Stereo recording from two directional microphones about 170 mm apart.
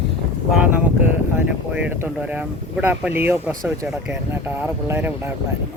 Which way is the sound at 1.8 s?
10° right (ahead or behind).